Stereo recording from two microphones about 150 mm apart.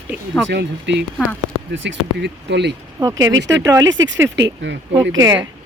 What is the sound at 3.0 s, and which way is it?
Speech, 25° right (ahead or behind).